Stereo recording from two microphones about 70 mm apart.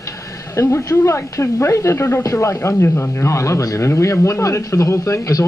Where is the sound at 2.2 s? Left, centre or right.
Left.